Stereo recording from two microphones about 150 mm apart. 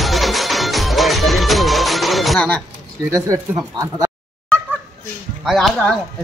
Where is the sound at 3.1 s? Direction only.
20° right (ahead or behind).